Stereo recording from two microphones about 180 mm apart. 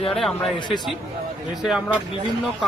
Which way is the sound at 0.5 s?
25° left (ahead or behind).